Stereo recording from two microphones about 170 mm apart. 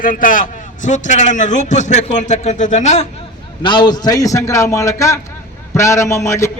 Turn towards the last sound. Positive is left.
turn(degrees=15)  # may be behind; listen again after turning